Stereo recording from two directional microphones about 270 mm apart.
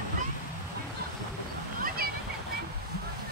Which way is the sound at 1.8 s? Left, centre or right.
Right.